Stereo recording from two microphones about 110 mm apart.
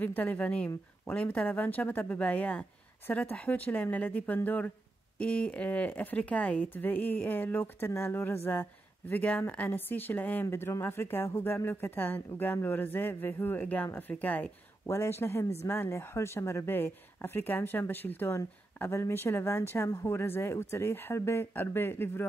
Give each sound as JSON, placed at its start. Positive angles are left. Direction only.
{"t": 0.0, "sound": "speech", "side_deg": 15}